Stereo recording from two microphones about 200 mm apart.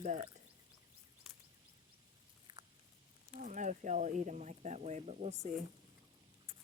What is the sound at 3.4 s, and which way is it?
Speech, 40° right (ahead or behind).